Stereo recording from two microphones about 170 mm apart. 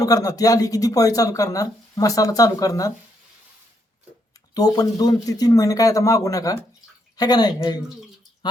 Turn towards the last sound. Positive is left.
turn(degrees=25)  # may be behind; listen again after turning